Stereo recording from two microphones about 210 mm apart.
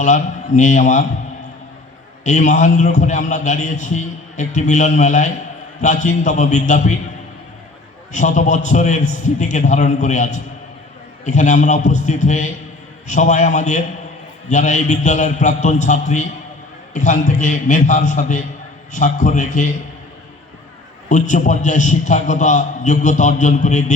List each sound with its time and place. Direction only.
0.0 s a man's voice: 35° left (ahead or behind)
2.2 s a man's voice: 35° left (ahead or behind)
8.1 s a man's voice: 35° left (ahead or behind)
21.1 s a man's voice: 35° left (ahead or behind)